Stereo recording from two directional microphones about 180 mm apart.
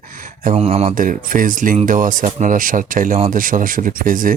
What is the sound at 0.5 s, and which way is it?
Speech, 35° right (ahead or behind).